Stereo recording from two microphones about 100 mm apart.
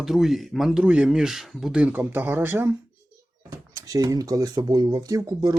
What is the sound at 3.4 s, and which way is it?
Speech, 35° right (ahead or behind).